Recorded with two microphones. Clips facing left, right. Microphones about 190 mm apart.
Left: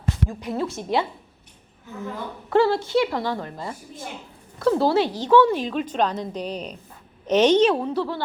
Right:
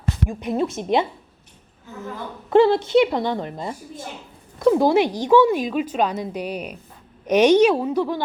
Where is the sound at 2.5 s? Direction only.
20° right (ahead or behind).